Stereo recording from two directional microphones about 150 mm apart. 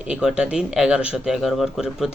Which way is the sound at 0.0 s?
5° right (ahead or behind).